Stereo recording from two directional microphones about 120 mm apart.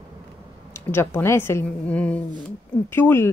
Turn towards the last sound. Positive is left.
turn(degrees=20)  # may be behind; listen again after turning